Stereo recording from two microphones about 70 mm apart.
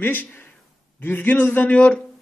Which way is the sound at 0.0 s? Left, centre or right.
Left.